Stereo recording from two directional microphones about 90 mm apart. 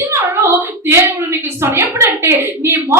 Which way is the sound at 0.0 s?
25° right (ahead or behind).